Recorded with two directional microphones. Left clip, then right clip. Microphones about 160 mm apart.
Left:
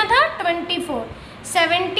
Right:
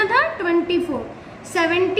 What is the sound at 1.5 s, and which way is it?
Speech, 75° left (ahead or behind).